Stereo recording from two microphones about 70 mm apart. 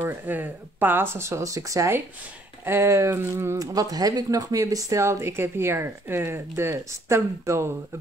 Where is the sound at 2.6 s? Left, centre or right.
Right.